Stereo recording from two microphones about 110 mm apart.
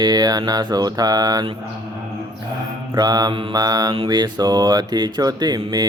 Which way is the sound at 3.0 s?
35° right (ahead or behind).